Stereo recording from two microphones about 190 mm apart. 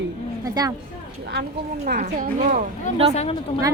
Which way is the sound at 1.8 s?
45° right (ahead or behind).